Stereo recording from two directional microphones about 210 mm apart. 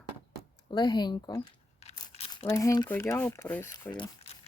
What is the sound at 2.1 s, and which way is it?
Crumpling, 30° left (ahead or behind).